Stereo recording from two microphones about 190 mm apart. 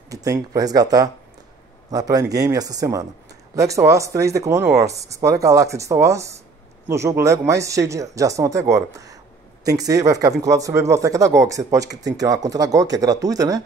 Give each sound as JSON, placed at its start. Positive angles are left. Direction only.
{"t": 0.1, "sound": "speech", "side_deg": -20}